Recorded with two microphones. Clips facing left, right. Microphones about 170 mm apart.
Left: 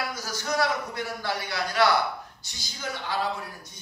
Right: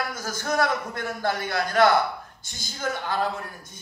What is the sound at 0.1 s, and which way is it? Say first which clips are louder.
A man's voice: right 2 dB; 50° right (ahead or behind).